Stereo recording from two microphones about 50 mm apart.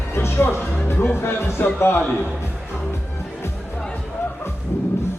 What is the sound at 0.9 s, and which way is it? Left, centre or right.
A man's voice, left.